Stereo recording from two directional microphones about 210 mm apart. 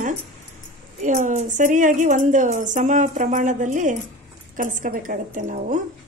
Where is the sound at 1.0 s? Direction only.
35° right (ahead or behind).